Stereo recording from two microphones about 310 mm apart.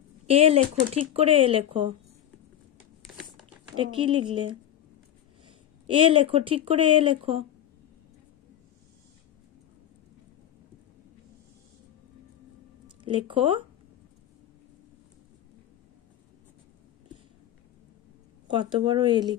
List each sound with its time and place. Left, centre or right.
0.3 s speech: centre
3.7 s speech: centre
5.9 s speech: centre
12.8 s speech: centre
18.5 s speech: centre